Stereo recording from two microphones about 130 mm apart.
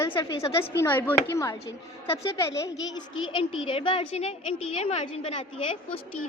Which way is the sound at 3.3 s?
40° left (ahead or behind).